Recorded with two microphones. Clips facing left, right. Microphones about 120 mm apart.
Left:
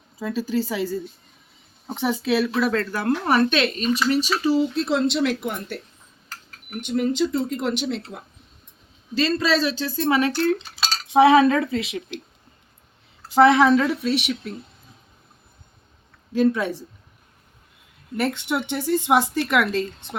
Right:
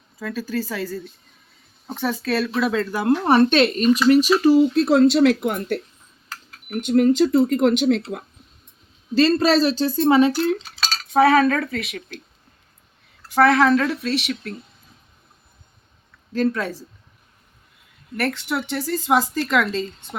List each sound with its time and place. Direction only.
0.2 s speech: 25° left (ahead or behind)
2.5 s speech: centre (ahead or behind)
3.0 s speech: 25° right (ahead or behind); by 3.9 s 40° right (ahead or behind)
4.1 s speech: 55° right (ahead or behind)
6.2 s a sound: 80° right
6.8 s speech: 50° right (ahead or behind)
9.1 s speech: 40° right (ahead or behind); by 10.3 s 25° right (ahead or behind)
10.3 s cutlery: 10° right (ahead or behind)
10.8 s cutlery: 5° left (ahead or behind)
11.2 s speech: 20° left (ahead or behind)
13.3 s speech: 20° left (ahead or behind)
16.3 s speech: 5° left (ahead or behind)
18.2 s speech: 20° left (ahead or behind)